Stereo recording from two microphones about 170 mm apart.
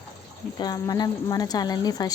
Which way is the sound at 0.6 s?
25° left (ahead or behind).